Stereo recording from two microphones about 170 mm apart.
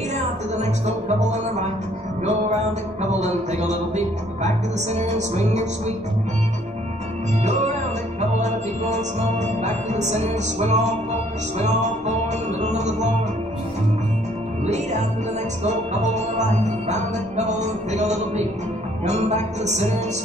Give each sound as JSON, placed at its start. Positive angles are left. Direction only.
{"t": 0.6, "sound": "speech", "side_deg": -40}
{"t": 3.1, "sound": "speech", "side_deg": -40}
{"t": 8.4, "sound": "speech", "side_deg": -40}
{"t": 14.6, "sound": "music", "side_deg": -40}
{"t": 15.6, "sound": "speech", "side_deg": -40}